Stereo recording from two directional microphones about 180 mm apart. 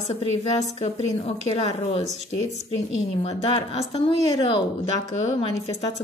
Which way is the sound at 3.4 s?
35° left (ahead or behind).